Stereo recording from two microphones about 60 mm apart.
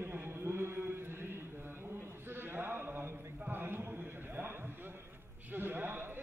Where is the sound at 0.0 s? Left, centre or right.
Right.